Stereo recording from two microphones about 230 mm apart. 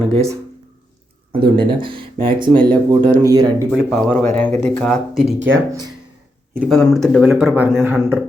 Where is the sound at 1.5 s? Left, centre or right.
Right.